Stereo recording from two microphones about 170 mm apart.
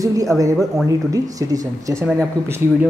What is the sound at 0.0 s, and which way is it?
Speech, 20° right (ahead or behind).